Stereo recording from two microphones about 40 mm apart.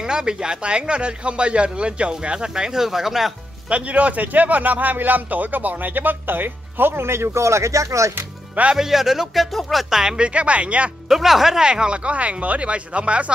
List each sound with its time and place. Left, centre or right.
0.0 s speech: centre
3.6 s a man's voice: right
8.7 s speech: centre
9.4 s speech: centre
9.8 s speech: centre
10.1 s speech: right
11.1 s speech: centre
11.6 s speech: right